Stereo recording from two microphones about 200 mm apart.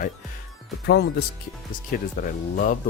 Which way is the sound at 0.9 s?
55° left (ahead or behind).